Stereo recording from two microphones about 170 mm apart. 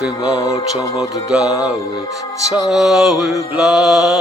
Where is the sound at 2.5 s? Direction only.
Centre (ahead or behind).